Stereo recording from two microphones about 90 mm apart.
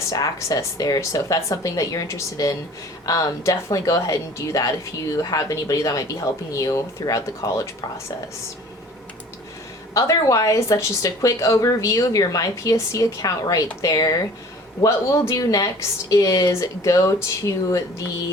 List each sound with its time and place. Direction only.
0.1 s speech: 40° left (ahead or behind)
9.9 s speech: 35° left (ahead or behind)
14.8 s speech: 30° left (ahead or behind)